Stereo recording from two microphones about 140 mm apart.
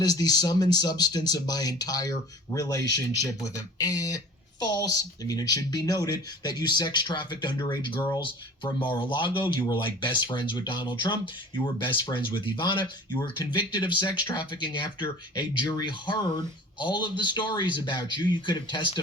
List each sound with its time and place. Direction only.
0.0 s speech: 30° left (ahead or behind)